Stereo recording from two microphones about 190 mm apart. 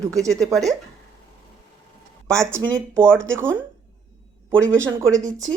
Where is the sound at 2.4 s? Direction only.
15° right (ahead or behind).